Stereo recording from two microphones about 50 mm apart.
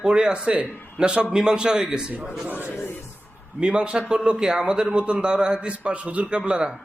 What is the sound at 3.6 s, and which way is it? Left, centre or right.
A man's voice, centre.